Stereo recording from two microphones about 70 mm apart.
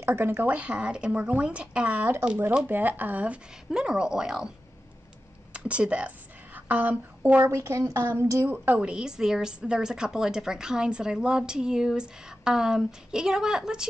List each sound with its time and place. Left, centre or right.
0.0 s speech: right
3.7 s a woman's voice: centre
5.5 s a sound: centre
7.4 s a woman's voice: right
8.7 s a woman's voice: centre